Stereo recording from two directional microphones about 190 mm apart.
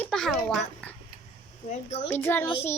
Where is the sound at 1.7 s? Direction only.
35° left (ahead or behind).